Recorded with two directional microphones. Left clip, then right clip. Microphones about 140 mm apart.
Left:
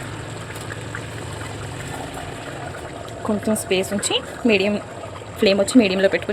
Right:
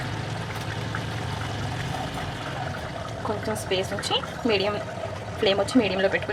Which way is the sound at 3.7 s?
55° left (ahead or behind).